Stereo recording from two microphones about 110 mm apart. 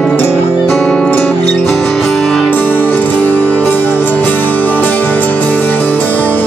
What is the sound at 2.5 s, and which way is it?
Music, 15° left (ahead or behind).